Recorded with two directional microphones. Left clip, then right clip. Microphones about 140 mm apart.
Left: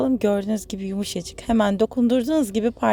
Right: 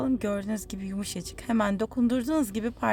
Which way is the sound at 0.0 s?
30° left (ahead or behind).